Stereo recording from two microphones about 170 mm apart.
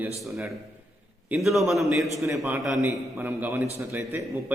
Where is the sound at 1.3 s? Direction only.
Centre (ahead or behind).